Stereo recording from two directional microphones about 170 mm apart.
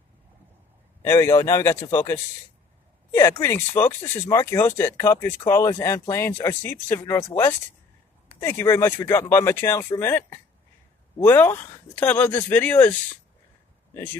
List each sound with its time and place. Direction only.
1.0 s speech: 20° left (ahead or behind)